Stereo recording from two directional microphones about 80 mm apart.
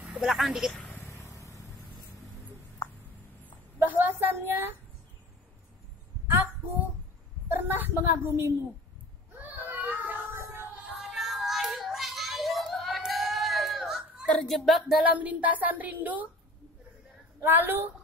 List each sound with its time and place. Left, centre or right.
0.0 s speech: centre
1.0 s vehicle: left
3.8 s speech: right
7.4 s a woman's voice: right
9.6 s child singing: right
11.0 s child singing: centre
15.1 s speech: centre
17.4 s speech: right